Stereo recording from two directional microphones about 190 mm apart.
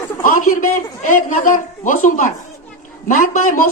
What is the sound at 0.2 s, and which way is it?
A man's voice, 45° left (ahead or behind).